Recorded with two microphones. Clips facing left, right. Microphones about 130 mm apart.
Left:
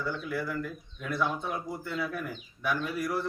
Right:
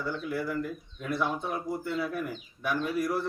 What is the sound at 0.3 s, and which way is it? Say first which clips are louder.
Speech: right 2 dB; 10° right (ahead or behind).